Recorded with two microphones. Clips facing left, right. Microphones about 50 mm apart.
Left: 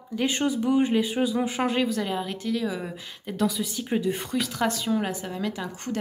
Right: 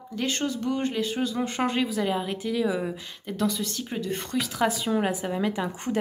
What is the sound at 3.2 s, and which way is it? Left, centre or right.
Speech, centre.